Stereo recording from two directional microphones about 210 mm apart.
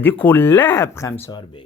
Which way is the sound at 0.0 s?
10° left (ahead or behind).